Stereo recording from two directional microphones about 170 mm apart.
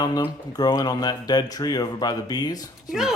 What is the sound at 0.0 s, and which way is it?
Speech, 20° left (ahead or behind).